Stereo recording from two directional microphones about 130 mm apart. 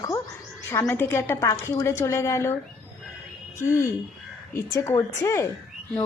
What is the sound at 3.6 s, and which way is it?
A woman's voice, 20° left (ahead or behind).